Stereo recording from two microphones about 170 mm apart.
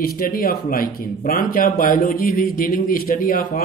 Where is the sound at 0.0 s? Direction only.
55° left (ahead or behind).